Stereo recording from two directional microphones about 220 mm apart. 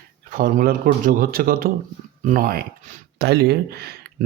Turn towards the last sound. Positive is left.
turn(degrees=-45)  # may be behind; listen again after turning